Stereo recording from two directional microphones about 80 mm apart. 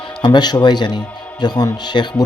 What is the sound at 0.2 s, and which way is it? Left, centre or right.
A man's voice, left.